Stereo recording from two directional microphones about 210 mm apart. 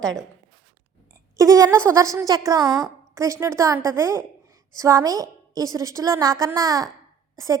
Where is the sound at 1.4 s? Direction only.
15° right (ahead or behind).